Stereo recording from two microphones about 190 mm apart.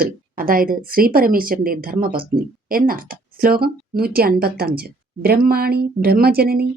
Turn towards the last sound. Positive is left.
turn(degrees=-55)  # may be behind; listen again after turning